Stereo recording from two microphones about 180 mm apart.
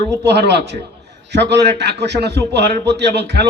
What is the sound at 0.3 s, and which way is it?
A man's voice, 70° right (ahead or behind).